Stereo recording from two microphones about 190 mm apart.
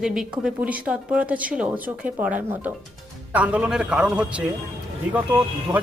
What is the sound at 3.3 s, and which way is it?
Speech, 5° right (ahead or behind).